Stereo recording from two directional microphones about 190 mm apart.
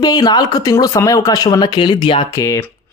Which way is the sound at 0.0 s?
20° left (ahead or behind).